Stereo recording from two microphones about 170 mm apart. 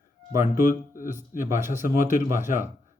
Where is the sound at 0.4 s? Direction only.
50° left (ahead or behind).